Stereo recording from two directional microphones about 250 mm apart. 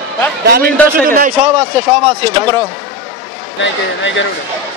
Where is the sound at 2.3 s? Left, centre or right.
Centre.